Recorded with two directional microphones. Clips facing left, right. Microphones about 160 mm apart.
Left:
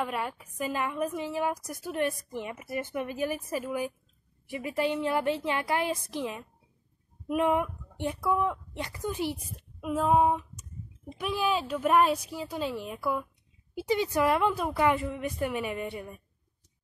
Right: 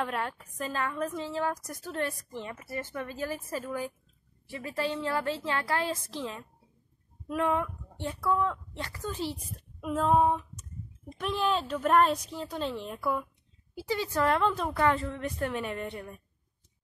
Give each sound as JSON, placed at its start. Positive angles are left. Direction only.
{"t": 0.0, "sound": "a woman's voice", "side_deg": 5}
{"t": 13.7, "sound": "a woman's voice", "side_deg": 20}